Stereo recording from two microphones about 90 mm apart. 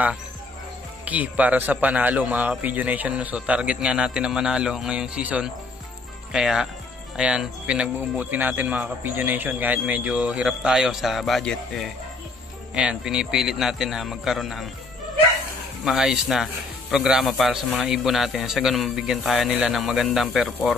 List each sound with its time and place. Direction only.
1.0 s a man's voice: 15° right (ahead or behind); by 11.9 s 5° left (ahead or behind)
12.7 s a man's voice: 10° right (ahead or behind)
15.8 s a man's voice: 5° right (ahead or behind)